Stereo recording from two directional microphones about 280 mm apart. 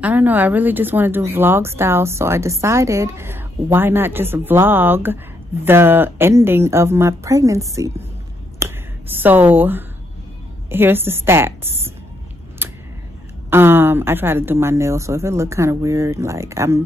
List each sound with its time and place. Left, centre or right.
0.0 s speech: centre
8.5 s finger snapping: centre
10.7 s speech: centre
12.6 s a sound: centre
13.5 s speech: centre